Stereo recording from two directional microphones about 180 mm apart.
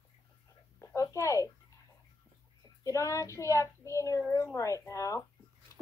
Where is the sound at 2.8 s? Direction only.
15° left (ahead or behind).